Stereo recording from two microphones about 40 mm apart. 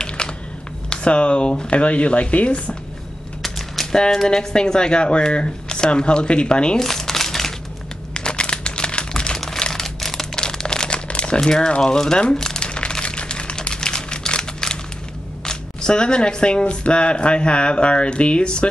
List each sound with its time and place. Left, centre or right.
0.2 s a sound: left
0.8 s speech: left
3.4 s typewriter: centre
3.9 s speech: centre
6.8 s crumpling: centre
8.1 s crumpling: left
9.6 s typewriter: centre
10.3 s crumpling: centre
11.8 s speech: centre
12.4 s crumpling: centre
12.6 s a sound: left
15.4 s speech: left